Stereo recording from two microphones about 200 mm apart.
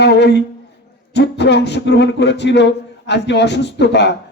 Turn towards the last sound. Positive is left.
turn(degrees=60)  # may be behind; listen again after turning